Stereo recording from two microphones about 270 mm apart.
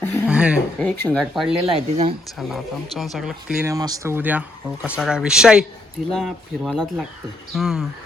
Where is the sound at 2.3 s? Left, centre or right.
Centre.